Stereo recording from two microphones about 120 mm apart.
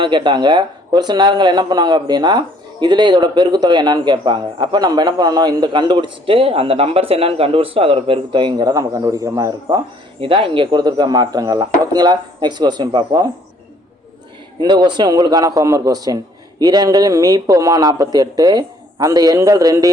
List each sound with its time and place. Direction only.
0.0 s a man's voice: 40° right (ahead or behind)
10.2 s a man's voice: 50° right (ahead or behind)
14.6 s a man's voice: 35° right (ahead or behind)